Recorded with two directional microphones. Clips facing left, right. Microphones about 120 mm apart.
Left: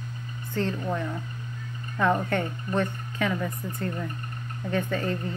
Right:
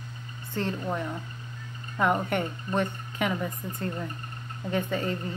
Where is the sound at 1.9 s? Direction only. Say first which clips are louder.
Left 1 dB; 15° right (ahead or behind).